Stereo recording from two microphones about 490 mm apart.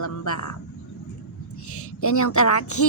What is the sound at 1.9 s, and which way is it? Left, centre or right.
Speech, left.